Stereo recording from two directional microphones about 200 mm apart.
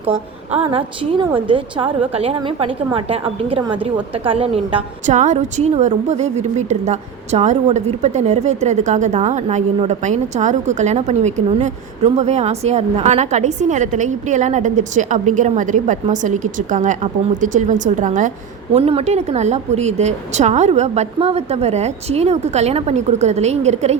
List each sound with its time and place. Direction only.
0.5 s a woman's voice: 25° right (ahead or behind)